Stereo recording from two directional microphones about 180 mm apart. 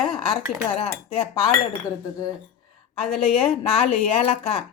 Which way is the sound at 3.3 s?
35° left (ahead or behind).